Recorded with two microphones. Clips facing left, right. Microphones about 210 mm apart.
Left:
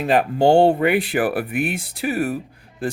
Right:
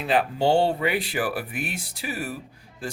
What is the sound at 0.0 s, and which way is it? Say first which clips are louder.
Speech: left 6 dB; 50° left (ahead or behind).